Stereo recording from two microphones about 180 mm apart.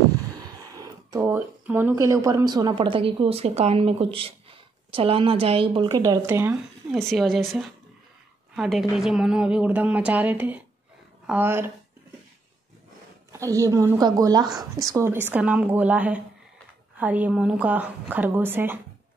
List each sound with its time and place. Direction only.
0.7 s a woman's voice: 15° right (ahead or behind)
6.0 s a woman's voice: 15° right (ahead or behind)
6.9 s a woman's voice: centre (ahead or behind)
13.3 s a woman's voice: 15° right (ahead or behind)